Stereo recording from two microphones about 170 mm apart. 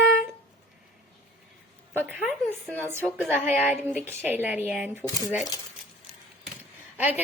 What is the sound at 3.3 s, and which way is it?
A woman's voice, 10° right (ahead or behind).